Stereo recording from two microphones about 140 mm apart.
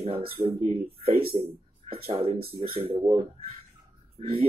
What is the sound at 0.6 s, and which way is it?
Speech, 50° right (ahead or behind).